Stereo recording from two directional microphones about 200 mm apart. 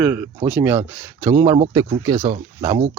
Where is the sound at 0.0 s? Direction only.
10° right (ahead or behind).